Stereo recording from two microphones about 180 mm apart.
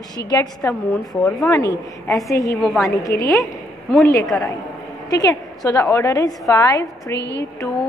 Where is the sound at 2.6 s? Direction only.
Centre (ahead or behind).